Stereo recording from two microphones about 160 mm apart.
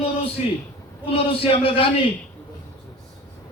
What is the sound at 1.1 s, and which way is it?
Speech, 35° left (ahead or behind).